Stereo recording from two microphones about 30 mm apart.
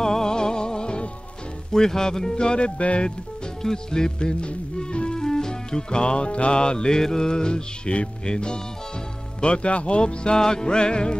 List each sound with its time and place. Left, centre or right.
0.0 s music: centre
1.7 s music: centre
2.3 s speech: left
2.8 s speech: left
3.6 s music: left
5.2 s music: centre
6.9 s music: centre
9.4 s speech: left
10.3 s music: left